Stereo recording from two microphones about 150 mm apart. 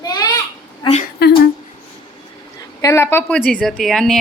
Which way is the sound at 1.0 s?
90° left.